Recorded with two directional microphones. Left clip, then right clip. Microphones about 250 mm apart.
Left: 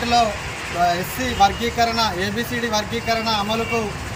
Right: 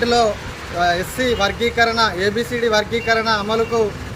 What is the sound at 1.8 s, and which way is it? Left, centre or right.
Speech, centre.